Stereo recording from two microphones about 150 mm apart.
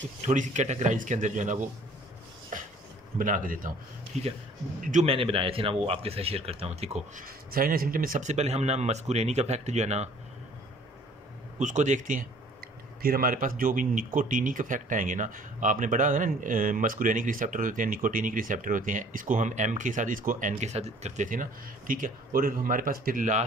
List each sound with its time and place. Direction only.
0.3 s speech: 55° right (ahead or behind)
2.5 s a sound: 60° right (ahead or behind)
3.2 s speech: 60° right (ahead or behind)
4.1 s speech: 50° right (ahead or behind)
5.0 s speech: 40° right (ahead or behind)
7.2 s speech: 75° right (ahead or behind); by 10.0 s 50° right (ahead or behind)
11.5 s speech: 55° right (ahead or behind)
13.0 s speech: 75° right (ahead or behind)